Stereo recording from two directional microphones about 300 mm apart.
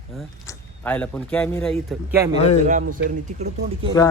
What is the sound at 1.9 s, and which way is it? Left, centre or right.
Speech, centre.